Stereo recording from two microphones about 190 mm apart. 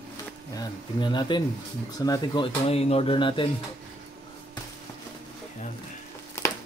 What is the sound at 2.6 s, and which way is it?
Speech, 35° left (ahead or behind).